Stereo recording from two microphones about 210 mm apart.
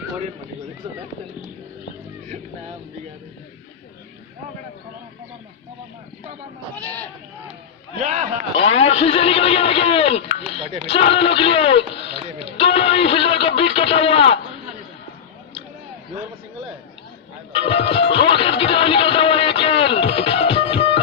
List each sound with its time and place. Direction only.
6.7 s speech: 5° left (ahead or behind)
8.0 s a man's voice: 35° right (ahead or behind)
8.8 s speech: 30° left (ahead or behind)
17.5 s music: 25° left (ahead or behind)